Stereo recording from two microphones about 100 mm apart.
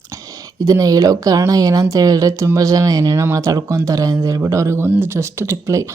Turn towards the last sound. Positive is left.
turn(degrees=-30)  # may be behind; listen again after turning